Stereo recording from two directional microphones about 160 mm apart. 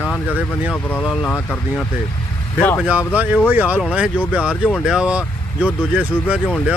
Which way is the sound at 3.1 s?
10° right (ahead or behind).